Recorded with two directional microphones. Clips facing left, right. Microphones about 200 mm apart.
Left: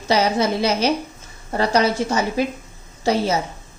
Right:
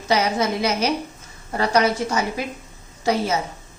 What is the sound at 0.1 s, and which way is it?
A woman's voice, 30° left (ahead or behind).